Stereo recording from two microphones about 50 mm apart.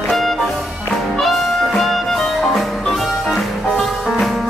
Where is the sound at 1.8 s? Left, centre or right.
Centre.